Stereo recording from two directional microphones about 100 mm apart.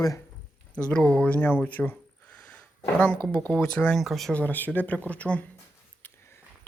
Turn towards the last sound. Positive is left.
turn(degrees=25)  # may be behind; listen again after turning